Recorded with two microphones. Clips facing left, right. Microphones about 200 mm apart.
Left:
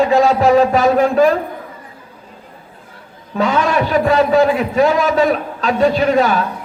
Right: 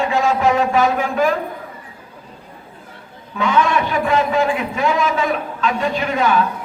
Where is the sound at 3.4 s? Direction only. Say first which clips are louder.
Left 2 dB; 35° left (ahead or behind).